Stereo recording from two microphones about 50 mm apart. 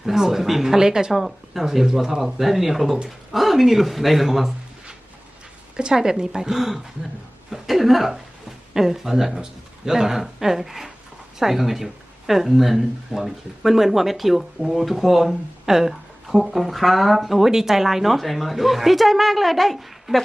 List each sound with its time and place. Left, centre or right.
0.0 s speech: centre
5.7 s speech: centre